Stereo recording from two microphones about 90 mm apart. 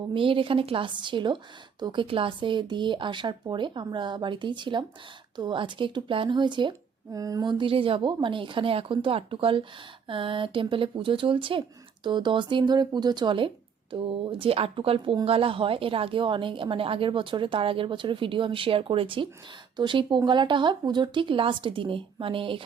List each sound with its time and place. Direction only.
0.1 s speech: 75° right (ahead or behind)
7.1 s a sound: 40° right (ahead or behind)
7.4 s speech: 75° right (ahead or behind)
12.0 s speech: 60° right (ahead or behind)
13.9 s speech: 80° right
19.7 s speech: 65° right (ahead or behind)